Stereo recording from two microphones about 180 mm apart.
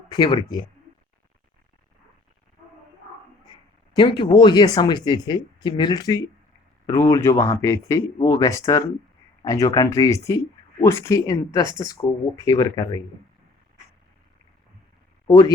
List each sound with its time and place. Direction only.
0.1 s speech: 25° left (ahead or behind)
3.9 s speech: 25° left (ahead or behind)
15.3 s speech: 20° left (ahead or behind)